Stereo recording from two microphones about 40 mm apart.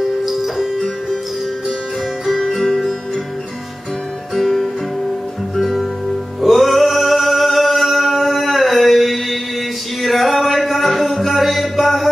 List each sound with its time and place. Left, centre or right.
0.2 s music: centre
2.2 s music: centre
4.4 s music: centre
6.4 s singing: centre
10.0 s music: centre